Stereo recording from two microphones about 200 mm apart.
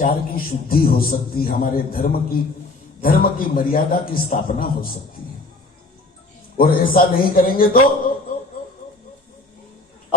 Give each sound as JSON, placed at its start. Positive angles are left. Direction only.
{"t": 0.0, "sound": "a man's voice", "side_deg": 45}
{"t": 6.6, "sound": "a man's voice", "side_deg": 45}